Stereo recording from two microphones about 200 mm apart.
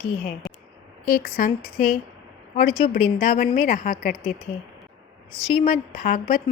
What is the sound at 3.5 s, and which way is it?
Speech, 45° left (ahead or behind).